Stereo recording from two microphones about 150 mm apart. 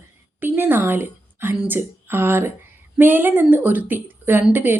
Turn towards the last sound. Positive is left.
turn(degrees=-10)  # may be behind; listen again after turning